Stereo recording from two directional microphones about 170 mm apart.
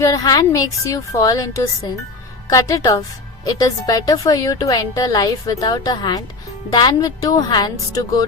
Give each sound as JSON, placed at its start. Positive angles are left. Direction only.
{"t": 0.0, "sound": "a woman's voice", "side_deg": 20}